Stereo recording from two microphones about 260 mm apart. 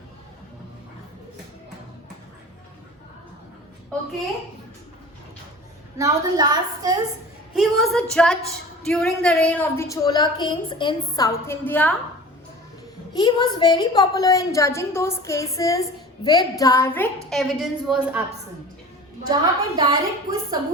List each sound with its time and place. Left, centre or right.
6.0 s a woman's voice: centre
7.5 s a woman's voice: centre
13.1 s a woman's voice: centre
19.3 s a woman's voice: centre